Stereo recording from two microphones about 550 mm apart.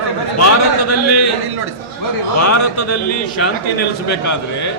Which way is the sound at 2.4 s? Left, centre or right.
Left.